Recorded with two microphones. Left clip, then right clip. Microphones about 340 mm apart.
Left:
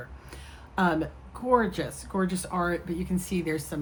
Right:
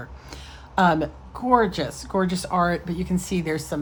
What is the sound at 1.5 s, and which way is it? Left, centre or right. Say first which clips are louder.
Speech: right 5 dB; right.